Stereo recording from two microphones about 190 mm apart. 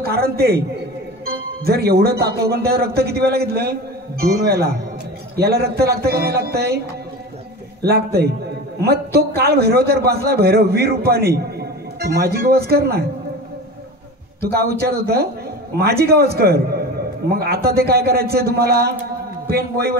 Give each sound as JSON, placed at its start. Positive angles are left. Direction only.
{"t": 0.0, "sound": "a man's voice", "side_deg": -55}
{"t": 7.9, "sound": "a man's voice", "side_deg": -55}
{"t": 14.4, "sound": "a man's voice", "side_deg": -55}